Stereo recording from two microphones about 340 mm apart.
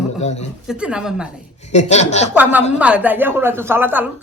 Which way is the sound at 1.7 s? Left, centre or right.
Centre.